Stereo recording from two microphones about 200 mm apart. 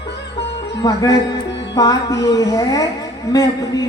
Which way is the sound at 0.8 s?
20° left (ahead or behind).